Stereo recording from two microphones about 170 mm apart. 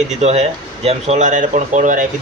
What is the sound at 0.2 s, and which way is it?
Speech, 40° right (ahead or behind).